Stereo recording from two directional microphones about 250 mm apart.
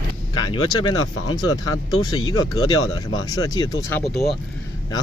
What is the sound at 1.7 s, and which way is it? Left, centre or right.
Speech, left.